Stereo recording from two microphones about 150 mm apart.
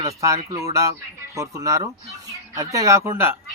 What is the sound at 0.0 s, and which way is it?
Speech, 20° right (ahead or behind).